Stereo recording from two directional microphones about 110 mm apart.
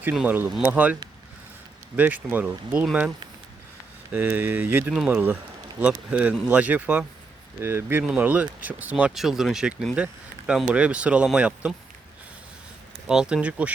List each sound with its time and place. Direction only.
0.0 s speech: 15° right (ahead or behind)
2.0 s speech: 15° right (ahead or behind)
4.1 s speech: 15° right (ahead or behind)
13.1 s speech: 5° right (ahead or behind)